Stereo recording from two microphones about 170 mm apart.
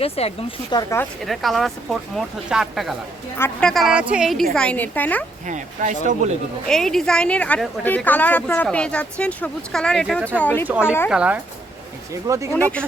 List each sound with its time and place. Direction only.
0.0 s speech: 35° left (ahead or behind)
0.7 s speech: 25° left (ahead or behind)
1.2 s speech: centre (ahead or behind)
3.3 s a woman's voice: 10° left (ahead or behind)
5.5 s speech: 45° right (ahead or behind)
6.7 s a woman's voice: centre (ahead or behind)
10.7 s speech: 5° right (ahead or behind)
12.1 s speech: 20° right (ahead or behind)
12.5 s a woman's voice: 10° left (ahead or behind)